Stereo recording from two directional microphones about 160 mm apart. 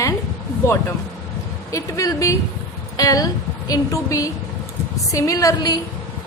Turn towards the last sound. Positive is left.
turn(degrees=25)  # may be behind; listen again after turning